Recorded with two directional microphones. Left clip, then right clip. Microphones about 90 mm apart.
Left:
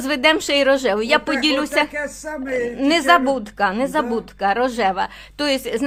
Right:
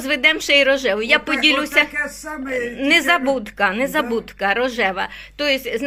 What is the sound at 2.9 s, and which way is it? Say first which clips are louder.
Speech: even; 15° left (ahead or behind).